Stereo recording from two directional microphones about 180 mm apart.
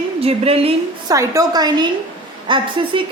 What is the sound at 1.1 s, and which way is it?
Speech, 20° right (ahead or behind).